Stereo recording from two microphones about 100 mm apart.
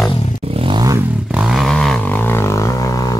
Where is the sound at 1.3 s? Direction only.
5° right (ahead or behind); by 3.1 s 35° left (ahead or behind).